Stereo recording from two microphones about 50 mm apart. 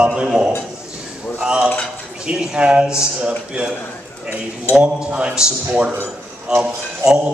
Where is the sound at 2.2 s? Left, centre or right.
Centre.